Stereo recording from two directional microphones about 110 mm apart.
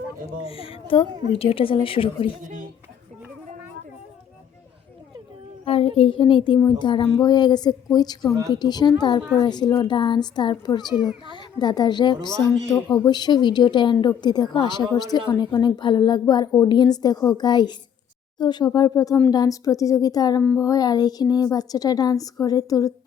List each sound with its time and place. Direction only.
0.4 s speech: 60° left (ahead or behind)
5.6 s a child's voice: 65° left (ahead or behind); by 23.0 s 30° left (ahead or behind)